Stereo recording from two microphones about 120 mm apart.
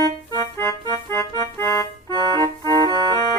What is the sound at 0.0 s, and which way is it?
Organ, 25° left (ahead or behind).